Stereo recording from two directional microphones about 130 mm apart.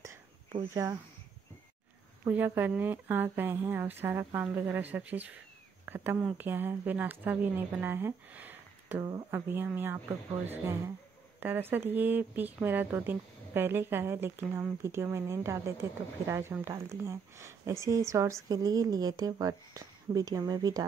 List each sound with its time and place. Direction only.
0.8 s speech: 30° right (ahead or behind)
2.2 s speech: 15° right (ahead or behind); by 20.8 s 30° right (ahead or behind)